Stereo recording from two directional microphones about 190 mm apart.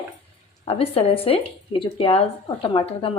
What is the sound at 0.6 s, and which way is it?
Speech, 30° left (ahead or behind).